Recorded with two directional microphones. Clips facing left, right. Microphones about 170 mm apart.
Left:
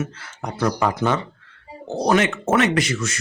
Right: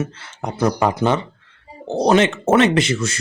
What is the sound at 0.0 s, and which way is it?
Speech, 25° right (ahead or behind).